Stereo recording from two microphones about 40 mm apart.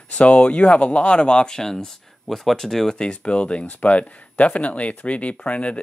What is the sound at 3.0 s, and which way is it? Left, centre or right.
Speech, left.